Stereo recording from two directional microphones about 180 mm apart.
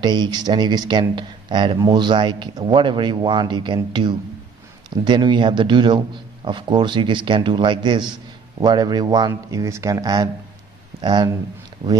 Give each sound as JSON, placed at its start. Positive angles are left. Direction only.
{"t": 0.0, "sound": "a man's voice", "side_deg": -25}